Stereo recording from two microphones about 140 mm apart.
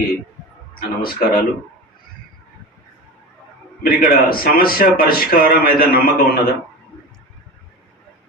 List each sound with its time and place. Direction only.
0.8 s speech: 90° left
3.8 s speech: 90° left